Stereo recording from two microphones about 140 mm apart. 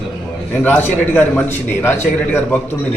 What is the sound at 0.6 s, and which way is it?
A man's voice, 15° left (ahead or behind).